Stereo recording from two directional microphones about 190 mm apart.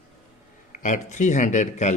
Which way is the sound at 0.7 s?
40° left (ahead or behind).